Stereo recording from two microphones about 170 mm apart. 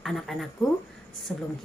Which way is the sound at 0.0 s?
Centre (ahead or behind).